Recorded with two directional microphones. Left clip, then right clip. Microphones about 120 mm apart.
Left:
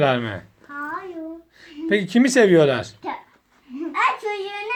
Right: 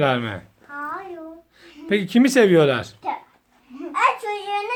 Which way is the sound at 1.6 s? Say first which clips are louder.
Left 1 dB; 25° right (ahead or behind).